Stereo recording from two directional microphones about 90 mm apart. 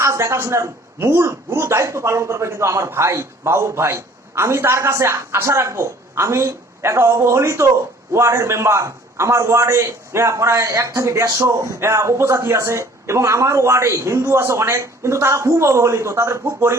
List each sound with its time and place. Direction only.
0.0 s a man's voice: 30° right (ahead or behind)